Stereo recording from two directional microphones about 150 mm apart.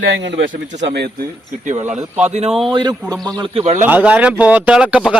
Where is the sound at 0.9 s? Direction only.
90° right.